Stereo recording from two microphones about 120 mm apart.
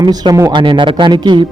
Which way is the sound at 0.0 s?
35° right (ahead or behind).